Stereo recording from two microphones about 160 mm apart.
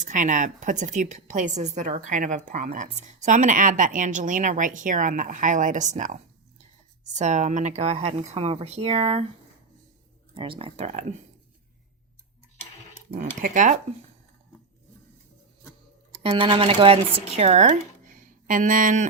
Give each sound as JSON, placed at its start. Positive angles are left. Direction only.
{"t": 0.0, "sound": "a woman's voice", "side_deg": -55}
{"t": 10.3, "sound": "speech", "side_deg": -35}
{"t": 13.1, "sound": "a woman's voice", "side_deg": -55}
{"t": 16.2, "sound": "speech", "side_deg": -30}